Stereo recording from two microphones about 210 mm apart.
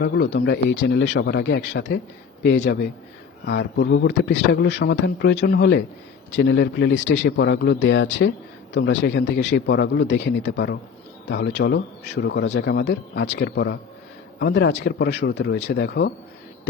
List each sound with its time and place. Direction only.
0.0 s speech: 55° left (ahead or behind)